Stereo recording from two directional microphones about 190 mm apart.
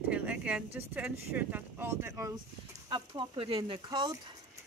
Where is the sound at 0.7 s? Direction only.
10° right (ahead or behind).